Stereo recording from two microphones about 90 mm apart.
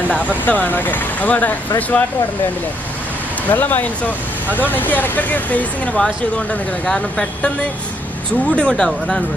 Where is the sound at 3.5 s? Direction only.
20° left (ahead or behind).